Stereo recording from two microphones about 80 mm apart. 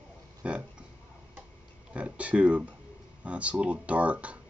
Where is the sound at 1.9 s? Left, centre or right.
Centre.